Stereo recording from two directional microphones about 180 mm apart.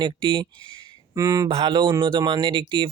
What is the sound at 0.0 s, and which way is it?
Speech, 25° right (ahead or behind).